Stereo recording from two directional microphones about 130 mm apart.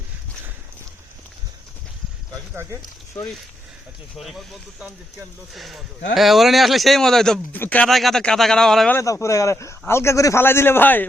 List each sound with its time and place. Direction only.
4.2 s speech: centre (ahead or behind)
5.5 s speech: centre (ahead or behind)
7.9 s speech: centre (ahead or behind)
9.0 s a man's voice: 20° left (ahead or behind)